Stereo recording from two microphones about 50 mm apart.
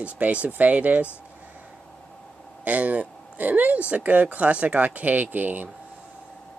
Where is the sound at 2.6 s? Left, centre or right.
Right.